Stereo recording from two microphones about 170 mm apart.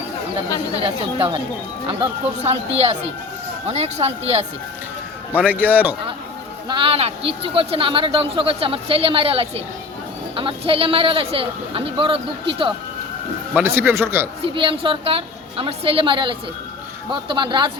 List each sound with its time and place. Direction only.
0.9 s speech: 30° right (ahead or behind)
3.7 s speech: 40° right (ahead or behind)
5.4 s speech: 10° right (ahead or behind)
6.7 s speech: 30° right (ahead or behind)
13.5 s speech: 10° right (ahead or behind)
14.4 s a man's voice: 30° right (ahead or behind)